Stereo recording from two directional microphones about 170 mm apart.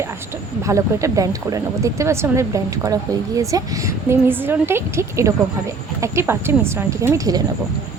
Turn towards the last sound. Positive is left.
turn(degrees=-20)  # may be behind; listen again after turning